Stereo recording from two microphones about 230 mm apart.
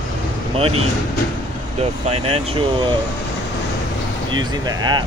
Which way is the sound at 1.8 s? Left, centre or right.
Right.